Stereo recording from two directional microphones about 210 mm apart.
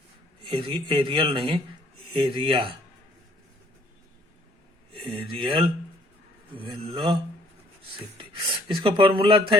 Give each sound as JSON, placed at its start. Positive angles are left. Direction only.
{"t": 0.4, "sound": "speech", "side_deg": -20}
{"t": 5.0, "sound": "speech", "side_deg": -25}
{"t": 8.2, "sound": "speech", "side_deg": -25}